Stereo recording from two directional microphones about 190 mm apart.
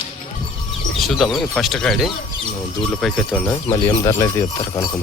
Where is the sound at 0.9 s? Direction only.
Centre (ahead or behind).